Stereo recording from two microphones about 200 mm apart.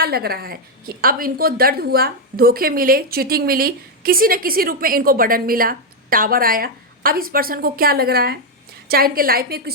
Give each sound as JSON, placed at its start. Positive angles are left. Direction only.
{"t": 0.0, "sound": "a woman's voice", "side_deg": -50}